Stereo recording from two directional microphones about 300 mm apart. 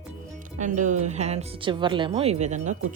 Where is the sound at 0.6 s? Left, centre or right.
Right.